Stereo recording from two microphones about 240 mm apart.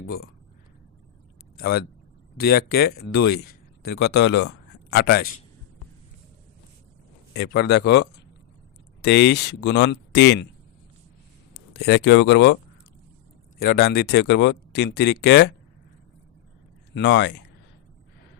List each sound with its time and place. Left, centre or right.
1.5 s speech: left
7.3 s speech: left
11.5 s speech: left
13.6 s speech: left
16.9 s speech: left